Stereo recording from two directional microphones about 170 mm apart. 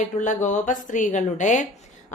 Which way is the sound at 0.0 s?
45° left (ahead or behind).